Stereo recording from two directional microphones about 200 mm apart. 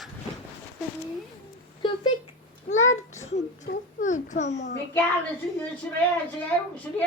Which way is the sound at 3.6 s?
40° left (ahead or behind).